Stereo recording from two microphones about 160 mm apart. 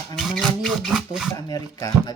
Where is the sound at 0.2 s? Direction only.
Centre (ahead or behind).